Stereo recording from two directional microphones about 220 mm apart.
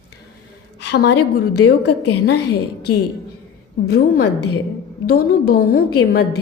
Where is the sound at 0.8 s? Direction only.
50° left (ahead or behind).